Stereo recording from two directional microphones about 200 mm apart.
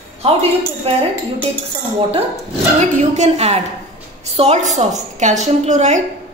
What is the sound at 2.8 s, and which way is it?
A woman's voice, 35° right (ahead or behind).